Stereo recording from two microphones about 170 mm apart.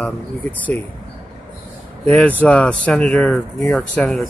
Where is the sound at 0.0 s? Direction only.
10° left (ahead or behind).